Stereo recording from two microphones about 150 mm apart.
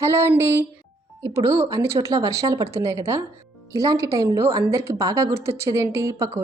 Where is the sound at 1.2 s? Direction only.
20° right (ahead or behind).